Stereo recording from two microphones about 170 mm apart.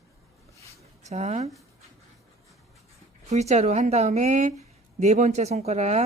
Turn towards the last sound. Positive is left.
turn(degrees=-40)  # may be behind; listen again after turning